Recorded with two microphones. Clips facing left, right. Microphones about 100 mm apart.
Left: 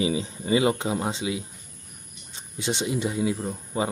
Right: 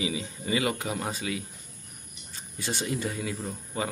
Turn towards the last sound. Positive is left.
turn(degrees=20)  # may be behind; listen again after turning